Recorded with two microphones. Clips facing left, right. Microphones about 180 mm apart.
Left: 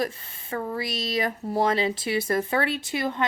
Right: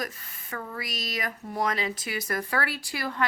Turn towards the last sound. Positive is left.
turn(degrees=20)  # may be behind; listen again after turning